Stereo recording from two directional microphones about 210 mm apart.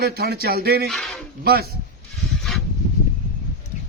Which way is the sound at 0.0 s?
50° right (ahead or behind).